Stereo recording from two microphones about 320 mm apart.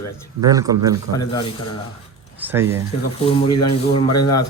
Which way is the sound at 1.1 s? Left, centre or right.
Centre.